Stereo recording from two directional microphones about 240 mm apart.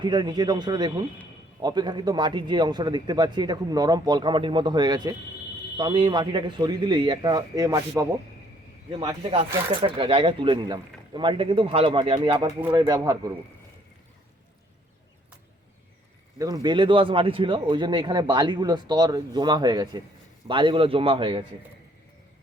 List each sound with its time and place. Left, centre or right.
0.0 s speech: centre
16.4 s speech: centre